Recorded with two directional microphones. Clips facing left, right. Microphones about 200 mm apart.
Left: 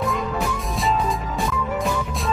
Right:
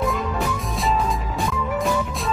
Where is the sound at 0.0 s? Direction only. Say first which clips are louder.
Even; centre (ahead or behind).